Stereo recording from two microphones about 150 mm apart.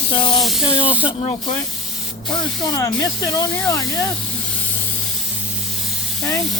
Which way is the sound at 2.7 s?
20° left (ahead or behind).